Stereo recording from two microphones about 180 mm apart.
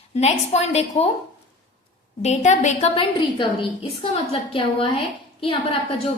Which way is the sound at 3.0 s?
30° left (ahead or behind).